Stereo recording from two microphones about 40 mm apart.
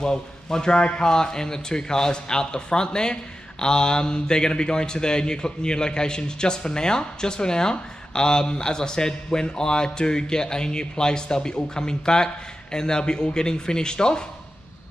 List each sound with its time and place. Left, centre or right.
0.0 s a man's voice: centre